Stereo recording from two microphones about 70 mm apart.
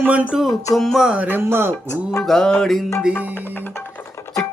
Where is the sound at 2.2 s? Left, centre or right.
Centre.